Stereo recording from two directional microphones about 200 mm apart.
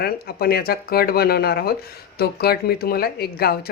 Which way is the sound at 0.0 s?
50° left (ahead or behind).